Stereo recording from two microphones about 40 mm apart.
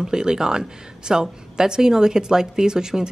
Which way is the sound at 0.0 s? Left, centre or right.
Centre.